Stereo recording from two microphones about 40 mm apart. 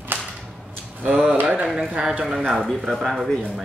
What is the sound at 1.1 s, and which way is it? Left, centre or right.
Speech, centre.